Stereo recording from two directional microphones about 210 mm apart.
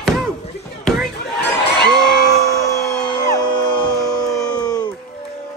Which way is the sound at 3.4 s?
20° left (ahead or behind).